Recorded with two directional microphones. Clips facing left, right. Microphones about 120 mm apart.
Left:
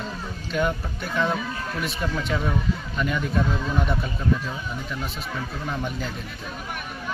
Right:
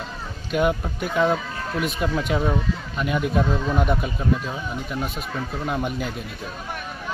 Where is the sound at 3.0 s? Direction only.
10° right (ahead or behind).